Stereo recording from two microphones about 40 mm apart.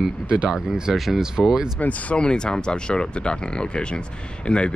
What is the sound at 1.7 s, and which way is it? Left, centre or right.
Speech, left.